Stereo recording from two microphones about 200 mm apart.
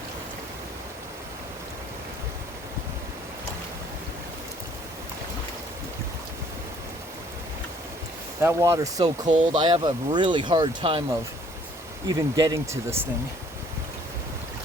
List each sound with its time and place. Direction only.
8.4 s speech: 15° right (ahead or behind)
9.3 s speech: 35° right (ahead or behind)
9.6 s speech: 25° right (ahead or behind)
12.0 s speech: 20° right (ahead or behind)